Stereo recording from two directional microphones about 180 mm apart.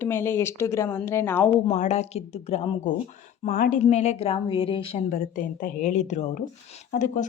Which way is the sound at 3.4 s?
50° left (ahead or behind).